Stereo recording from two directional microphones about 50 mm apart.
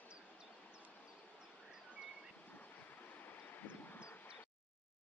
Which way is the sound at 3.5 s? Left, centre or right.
Left.